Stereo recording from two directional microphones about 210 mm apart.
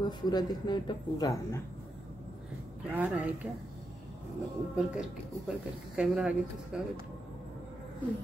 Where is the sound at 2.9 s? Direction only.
10° right (ahead or behind).